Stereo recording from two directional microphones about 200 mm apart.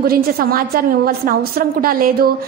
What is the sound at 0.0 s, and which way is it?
A woman's voice, 50° right (ahead or behind).